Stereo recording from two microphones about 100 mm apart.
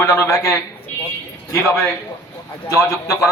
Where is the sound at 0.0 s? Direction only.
30° left (ahead or behind).